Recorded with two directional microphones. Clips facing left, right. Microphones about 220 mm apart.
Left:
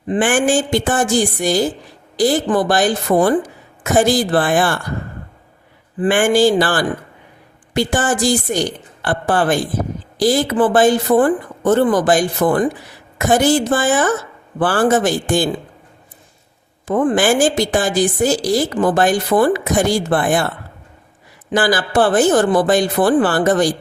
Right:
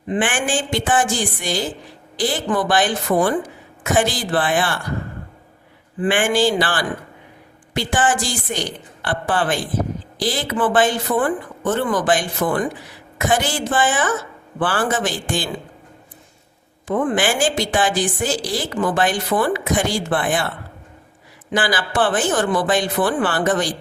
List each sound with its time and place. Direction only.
0.1 s a woman's voice: 40° left (ahead or behind)
6.0 s a woman's voice: 40° left (ahead or behind)
16.8 s a woman's voice: 40° left (ahead or behind)
21.5 s a woman's voice: 40° left (ahead or behind)